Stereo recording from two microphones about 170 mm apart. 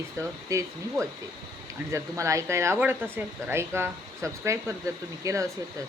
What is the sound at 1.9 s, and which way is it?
Speech, 15° right (ahead or behind).